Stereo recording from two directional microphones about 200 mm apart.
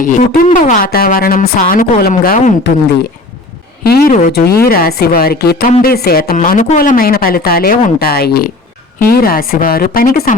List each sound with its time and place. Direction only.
0.0 s a woman's voice: 40° left (ahead or behind)
3.8 s a woman's voice: 45° left (ahead or behind)